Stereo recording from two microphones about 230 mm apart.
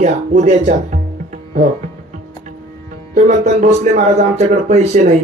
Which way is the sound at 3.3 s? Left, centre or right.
Right.